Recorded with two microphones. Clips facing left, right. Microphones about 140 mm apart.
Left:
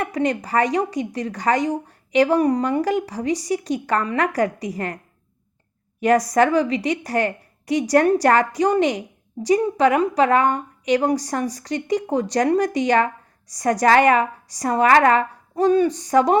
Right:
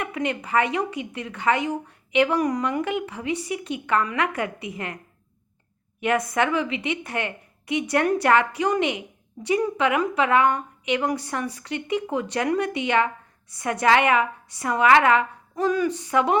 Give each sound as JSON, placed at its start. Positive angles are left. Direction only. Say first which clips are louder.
{"t": 0.0, "sound": "a woman's voice", "louder": "left 5 dB", "side_deg": 35}
{"t": 6.0, "sound": "a woman's voice", "louder": "left 6 dB", "side_deg": 40}